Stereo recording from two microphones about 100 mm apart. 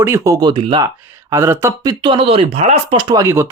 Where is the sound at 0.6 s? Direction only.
60° right (ahead or behind).